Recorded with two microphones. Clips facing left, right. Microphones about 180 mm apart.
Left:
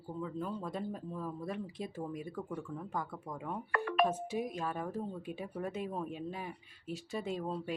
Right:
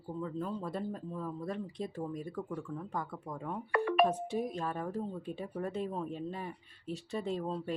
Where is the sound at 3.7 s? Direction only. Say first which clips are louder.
Right 3 dB; 20° right (ahead or behind).